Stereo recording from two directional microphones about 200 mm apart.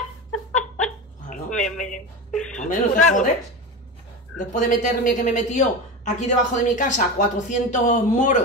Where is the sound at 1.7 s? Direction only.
5° left (ahead or behind).